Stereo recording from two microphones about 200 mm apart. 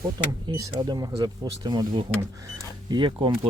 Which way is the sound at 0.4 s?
20° right (ahead or behind).